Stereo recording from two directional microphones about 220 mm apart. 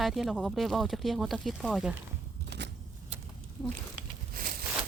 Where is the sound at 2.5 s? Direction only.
50° right (ahead or behind).